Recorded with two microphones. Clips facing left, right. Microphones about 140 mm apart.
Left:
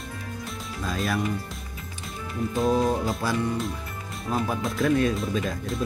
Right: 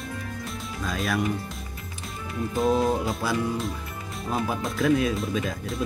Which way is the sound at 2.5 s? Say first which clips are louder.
Even; centre (ahead or behind).